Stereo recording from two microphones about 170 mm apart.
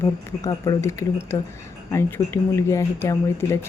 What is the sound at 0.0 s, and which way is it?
Speech, 15° left (ahead or behind).